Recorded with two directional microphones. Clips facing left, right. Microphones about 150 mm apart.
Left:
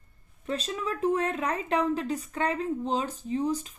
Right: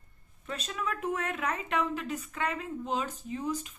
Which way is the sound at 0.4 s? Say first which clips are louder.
Left 4 dB; 30° left (ahead or behind).